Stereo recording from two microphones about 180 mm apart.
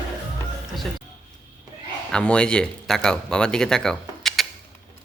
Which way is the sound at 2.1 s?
5° left (ahead or behind).